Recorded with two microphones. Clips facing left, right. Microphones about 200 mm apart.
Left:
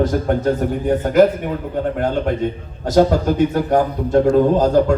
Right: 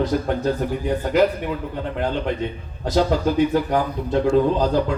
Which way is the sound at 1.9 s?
45° left (ahead or behind).